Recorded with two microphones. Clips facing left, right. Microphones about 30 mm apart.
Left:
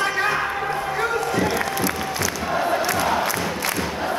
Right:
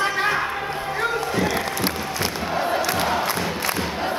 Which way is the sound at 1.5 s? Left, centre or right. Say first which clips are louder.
Left 1 dB; right.